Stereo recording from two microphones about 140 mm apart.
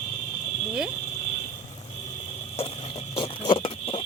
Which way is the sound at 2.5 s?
45° left (ahead or behind).